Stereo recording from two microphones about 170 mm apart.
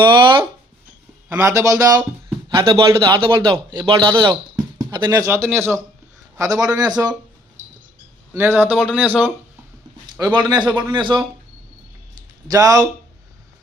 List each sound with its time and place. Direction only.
0.0 s speech: 30° right (ahead or behind)
1.3 s speech: 15° right (ahead or behind)
7.6 s a sound: 45° right (ahead or behind)
8.3 s a man's voice: 15° right (ahead or behind)
10.3 s speech: 25° right (ahead or behind)
12.5 s speech: 20° right (ahead or behind)